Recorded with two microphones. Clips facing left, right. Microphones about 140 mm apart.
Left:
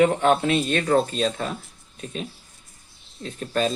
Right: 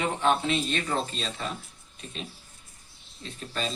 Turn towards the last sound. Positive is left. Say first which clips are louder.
# left 9 dB
turn(degrees=50)  # may be behind; listen again after turning